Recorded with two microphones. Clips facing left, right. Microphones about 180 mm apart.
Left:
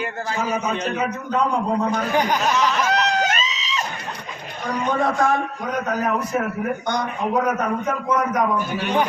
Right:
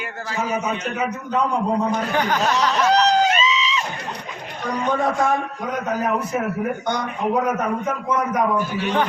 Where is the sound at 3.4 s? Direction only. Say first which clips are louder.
Right 6 dB; 40° left (ahead or behind).